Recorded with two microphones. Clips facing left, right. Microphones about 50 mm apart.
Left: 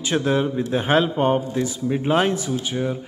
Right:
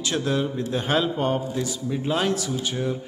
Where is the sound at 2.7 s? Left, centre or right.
Centre.